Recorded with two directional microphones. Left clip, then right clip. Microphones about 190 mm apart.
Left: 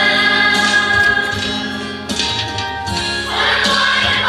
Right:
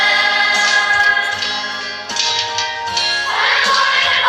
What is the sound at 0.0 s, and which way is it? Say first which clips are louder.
Music: left 1 dB; 50° left (ahead or behind).